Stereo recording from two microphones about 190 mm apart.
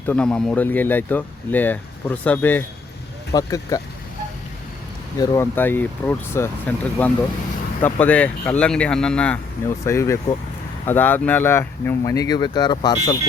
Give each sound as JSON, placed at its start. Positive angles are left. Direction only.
{"t": 0.0, "sound": "speech", "side_deg": 5}
{"t": 5.1, "sound": "speech", "side_deg": 20}